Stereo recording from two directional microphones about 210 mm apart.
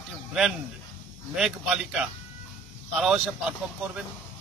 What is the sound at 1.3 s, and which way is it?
A man's voice, centre (ahead or behind).